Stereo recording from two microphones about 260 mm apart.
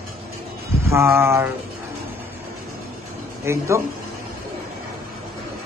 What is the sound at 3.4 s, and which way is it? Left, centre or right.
Speech, centre.